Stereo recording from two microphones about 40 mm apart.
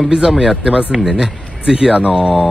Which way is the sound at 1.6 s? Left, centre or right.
Centre.